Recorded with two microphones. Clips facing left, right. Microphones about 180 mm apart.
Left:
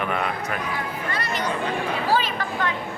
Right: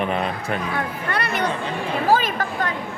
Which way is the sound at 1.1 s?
60° right (ahead or behind).